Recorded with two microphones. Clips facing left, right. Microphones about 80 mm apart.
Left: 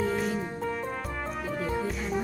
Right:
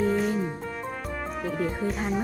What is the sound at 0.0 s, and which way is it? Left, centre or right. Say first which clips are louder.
Music: right 4 dB; centre.